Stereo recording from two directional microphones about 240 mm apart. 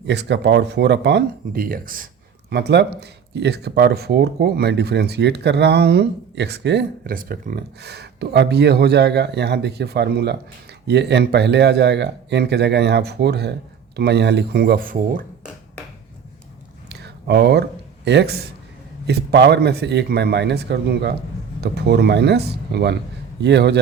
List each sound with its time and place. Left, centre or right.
0.1 s speech: right
16.9 s a sound: right
19.0 s speech: right